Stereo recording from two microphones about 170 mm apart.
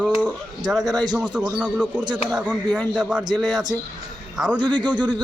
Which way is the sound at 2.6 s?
5° left (ahead or behind).